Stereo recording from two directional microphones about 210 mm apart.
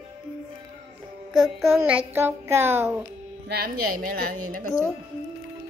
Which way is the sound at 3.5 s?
45° right (ahead or behind).